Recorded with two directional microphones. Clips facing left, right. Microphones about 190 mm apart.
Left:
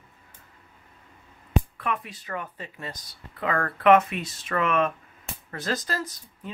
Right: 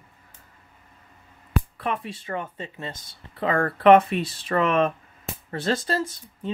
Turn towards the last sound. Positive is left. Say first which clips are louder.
# right 8 dB
turn(degrees=-25)  # may be behind; listen again after turning